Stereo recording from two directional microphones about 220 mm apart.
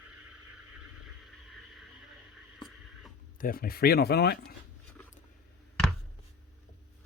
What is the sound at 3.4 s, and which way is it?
Speech, 40° left (ahead or behind).